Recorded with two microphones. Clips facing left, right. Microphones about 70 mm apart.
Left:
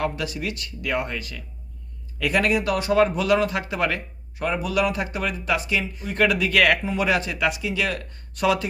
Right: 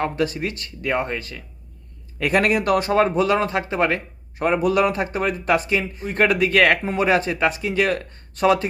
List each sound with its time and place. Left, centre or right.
0.0 s a man's voice: right
3.0 s a man's voice: right